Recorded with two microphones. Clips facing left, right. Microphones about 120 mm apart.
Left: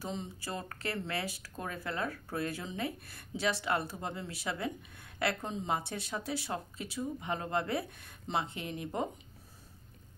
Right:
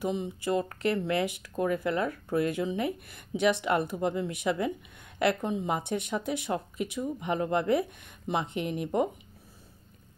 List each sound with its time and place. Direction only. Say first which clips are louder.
0.0 s speech: right 9 dB; 15° right (ahead or behind)